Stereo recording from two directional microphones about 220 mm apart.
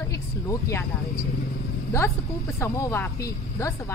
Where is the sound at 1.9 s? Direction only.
15° left (ahead or behind).